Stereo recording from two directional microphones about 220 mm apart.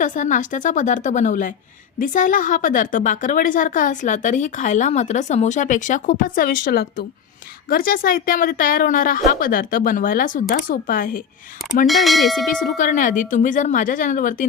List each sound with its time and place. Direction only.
0.0 s a woman's voice: 35° left (ahead or behind)
11.9 s speech: centre (ahead or behind)
12.7 s a woman's voice: 35° left (ahead or behind)